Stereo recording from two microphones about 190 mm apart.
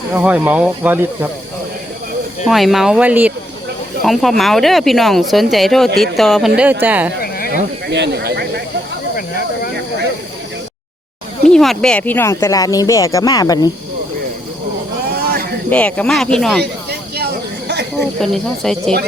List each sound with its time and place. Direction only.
0.1 s speech: 10° right (ahead or behind)
2.4 s speech: centre (ahead or behind)
7.2 s a sound: 50° left (ahead or behind)
7.9 s speech: 65° right (ahead or behind)
11.4 s speech: centre (ahead or behind); by 13.7 s 20° left (ahead or behind)
15.1 s a sound: 50° right (ahead or behind)
15.7 s speech: 5° left (ahead or behind)
18.0 s speech: centre (ahead or behind)